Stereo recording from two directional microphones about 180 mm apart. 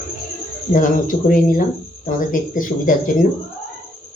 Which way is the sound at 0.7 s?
50° left (ahead or behind).